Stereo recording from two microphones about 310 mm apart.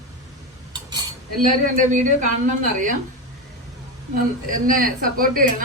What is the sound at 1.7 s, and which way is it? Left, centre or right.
Speech, right.